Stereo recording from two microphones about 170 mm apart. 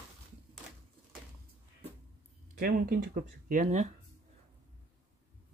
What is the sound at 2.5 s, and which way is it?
Speech, 60° right (ahead or behind).